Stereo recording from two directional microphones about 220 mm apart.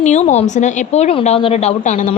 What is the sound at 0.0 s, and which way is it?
A woman's voice, 30° left (ahead or behind).